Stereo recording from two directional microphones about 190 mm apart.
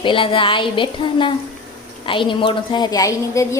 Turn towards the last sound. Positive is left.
turn(degrees=15)  # may be behind; listen again after turning